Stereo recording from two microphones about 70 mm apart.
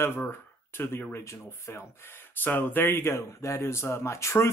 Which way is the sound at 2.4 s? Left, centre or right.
Left.